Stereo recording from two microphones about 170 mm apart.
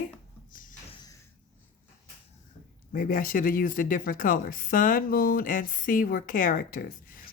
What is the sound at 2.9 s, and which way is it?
Speech, 55° left (ahead or behind).